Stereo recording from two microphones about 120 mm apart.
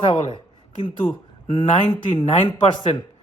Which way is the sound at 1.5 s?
45° left (ahead or behind).